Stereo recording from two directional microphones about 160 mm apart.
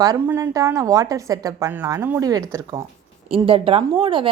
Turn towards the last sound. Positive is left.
turn(degrees=-35)  # may be behind; listen again after turning